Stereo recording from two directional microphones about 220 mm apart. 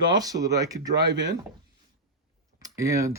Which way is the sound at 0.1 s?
15° right (ahead or behind).